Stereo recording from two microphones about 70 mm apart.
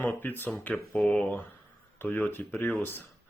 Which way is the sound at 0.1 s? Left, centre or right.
Left.